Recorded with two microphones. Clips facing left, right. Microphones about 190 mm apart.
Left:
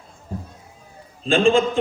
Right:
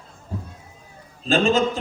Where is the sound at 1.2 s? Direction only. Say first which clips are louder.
Left 2 dB; 40° right (ahead or behind).